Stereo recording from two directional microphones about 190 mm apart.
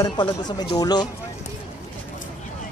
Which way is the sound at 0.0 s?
20° left (ahead or behind).